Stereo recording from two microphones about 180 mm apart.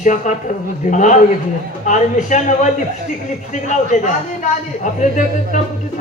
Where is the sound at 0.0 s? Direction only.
40° left (ahead or behind).